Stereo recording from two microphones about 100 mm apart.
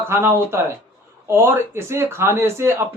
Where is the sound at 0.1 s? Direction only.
25° right (ahead or behind).